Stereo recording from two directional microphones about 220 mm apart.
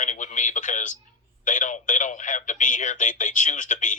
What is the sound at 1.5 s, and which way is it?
Speech, 35° left (ahead or behind).